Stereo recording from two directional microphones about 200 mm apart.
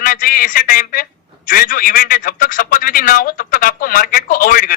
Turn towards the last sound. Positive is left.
turn(degrees=45)  # may be behind; listen again after turning